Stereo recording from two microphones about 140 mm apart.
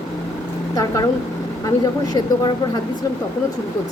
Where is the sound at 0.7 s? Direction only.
25° left (ahead or behind).